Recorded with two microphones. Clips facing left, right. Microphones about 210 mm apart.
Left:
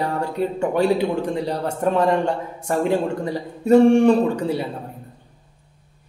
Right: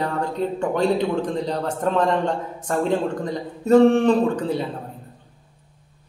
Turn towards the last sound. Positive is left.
turn(degrees=10)  # may be behind; listen again after turning